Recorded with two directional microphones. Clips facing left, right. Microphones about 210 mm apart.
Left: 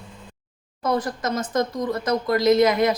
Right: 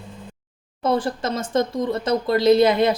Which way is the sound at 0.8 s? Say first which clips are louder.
Right 2 dB; 30° right (ahead or behind).